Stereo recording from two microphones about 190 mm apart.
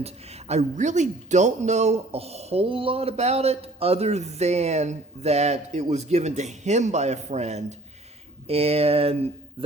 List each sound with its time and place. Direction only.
0.0 s speech: 35° right (ahead or behind)